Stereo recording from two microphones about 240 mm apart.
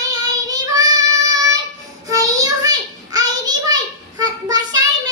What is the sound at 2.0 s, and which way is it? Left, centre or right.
Child singing, centre.